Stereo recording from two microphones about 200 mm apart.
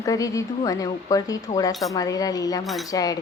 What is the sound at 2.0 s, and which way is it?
A woman's voice, 20° left (ahead or behind).